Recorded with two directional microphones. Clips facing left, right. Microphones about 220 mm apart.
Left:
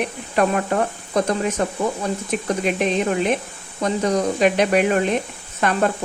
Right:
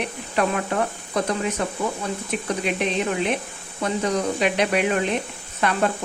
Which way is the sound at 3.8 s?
45° left (ahead or behind).